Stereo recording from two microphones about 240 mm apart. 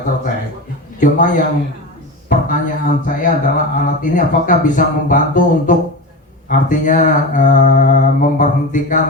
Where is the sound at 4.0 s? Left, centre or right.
Left.